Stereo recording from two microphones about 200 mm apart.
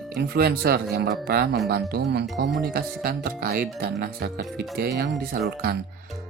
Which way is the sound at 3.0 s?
50° right (ahead or behind).